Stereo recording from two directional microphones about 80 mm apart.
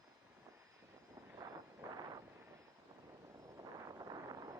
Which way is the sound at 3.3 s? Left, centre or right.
Right.